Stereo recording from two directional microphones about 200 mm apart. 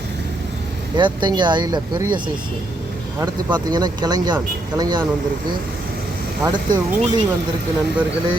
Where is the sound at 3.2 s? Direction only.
20° right (ahead or behind).